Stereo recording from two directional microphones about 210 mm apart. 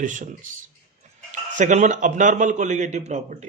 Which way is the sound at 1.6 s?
35° right (ahead or behind).